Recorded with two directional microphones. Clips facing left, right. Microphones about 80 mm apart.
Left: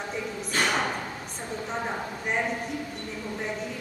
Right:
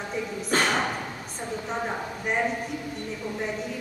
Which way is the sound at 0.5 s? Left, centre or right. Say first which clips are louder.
Right 3 dB; right.